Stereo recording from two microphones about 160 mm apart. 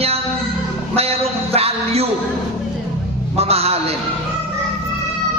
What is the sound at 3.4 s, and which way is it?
Speech, 40° right (ahead or behind).